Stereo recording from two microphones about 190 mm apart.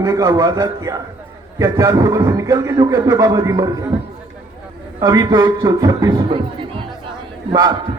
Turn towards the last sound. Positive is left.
turn(degrees=-20)  # may be behind; listen again after turning